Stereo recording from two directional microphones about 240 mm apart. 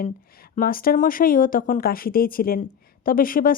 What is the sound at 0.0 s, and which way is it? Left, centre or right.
Speech, left.